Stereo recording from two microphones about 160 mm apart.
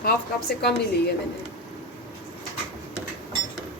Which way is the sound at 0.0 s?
75° left (ahead or behind).